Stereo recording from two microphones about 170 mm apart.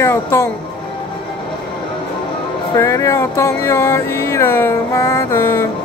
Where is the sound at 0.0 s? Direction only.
15° left (ahead or behind).